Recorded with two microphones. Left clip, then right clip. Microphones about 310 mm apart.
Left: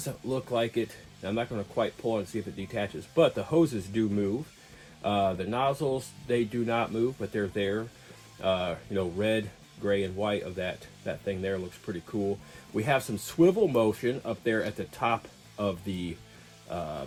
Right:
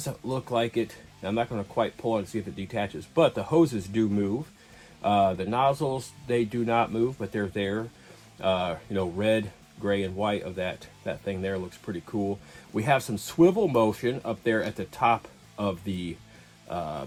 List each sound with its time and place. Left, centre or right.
0.3 s speech: centre